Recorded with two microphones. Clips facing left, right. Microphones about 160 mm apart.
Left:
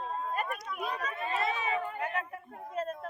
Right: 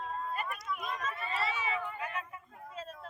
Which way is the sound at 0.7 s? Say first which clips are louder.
Left 2 dB; 35° left (ahead or behind).